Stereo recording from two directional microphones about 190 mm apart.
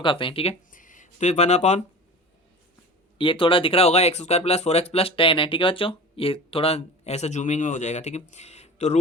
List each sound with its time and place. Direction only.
0.0 s speech: 25° left (ahead or behind)
0.7 s speech: 45° left (ahead or behind)
3.2 s speech: 25° left (ahead or behind)